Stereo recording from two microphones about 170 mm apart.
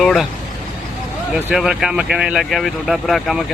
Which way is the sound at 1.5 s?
Centre (ahead or behind).